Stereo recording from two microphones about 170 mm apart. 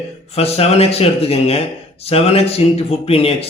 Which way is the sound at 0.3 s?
35° left (ahead or behind).